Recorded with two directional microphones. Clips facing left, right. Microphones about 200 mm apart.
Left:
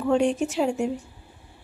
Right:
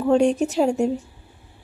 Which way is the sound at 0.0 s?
40° right (ahead or behind).